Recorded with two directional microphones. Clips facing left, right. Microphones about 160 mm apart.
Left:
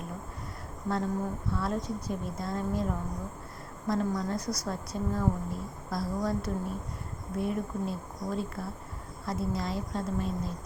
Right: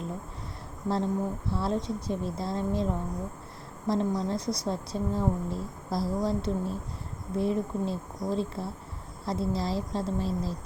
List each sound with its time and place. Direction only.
0.9 s a woman's voice: 30° right (ahead or behind)